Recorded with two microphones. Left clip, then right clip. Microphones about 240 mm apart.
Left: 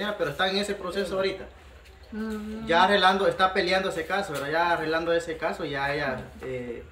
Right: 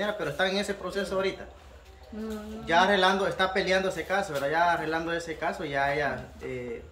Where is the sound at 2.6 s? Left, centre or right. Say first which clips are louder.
Left 2 dB; centre.